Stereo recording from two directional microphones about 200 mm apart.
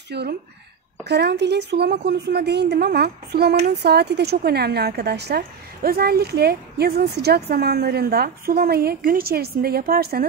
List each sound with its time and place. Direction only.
0.1 s a woman's voice: 55° right (ahead or behind)